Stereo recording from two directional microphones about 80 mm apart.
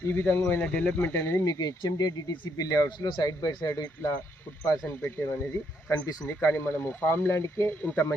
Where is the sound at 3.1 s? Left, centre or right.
Left.